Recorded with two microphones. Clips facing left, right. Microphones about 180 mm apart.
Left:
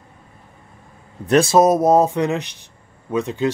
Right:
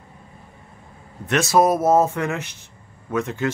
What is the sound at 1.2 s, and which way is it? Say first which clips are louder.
Speech: left 4 dB; 30° left (ahead or behind).